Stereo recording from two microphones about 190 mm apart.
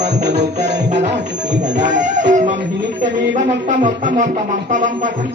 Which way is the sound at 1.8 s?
40° right (ahead or behind).